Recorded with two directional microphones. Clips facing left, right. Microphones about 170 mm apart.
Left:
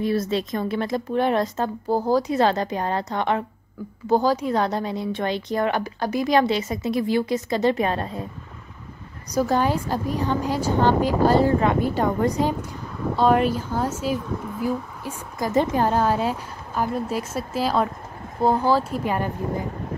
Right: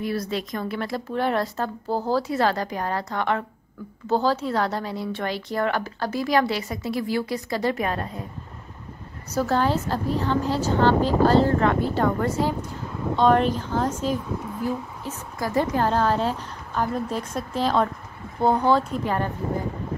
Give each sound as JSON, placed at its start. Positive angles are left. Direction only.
{"t": 0.0, "sound": "speech", "side_deg": 25}
{"t": 9.3, "sound": "a woman's voice", "side_deg": 15}
{"t": 13.1, "sound": "a woman's voice", "side_deg": 5}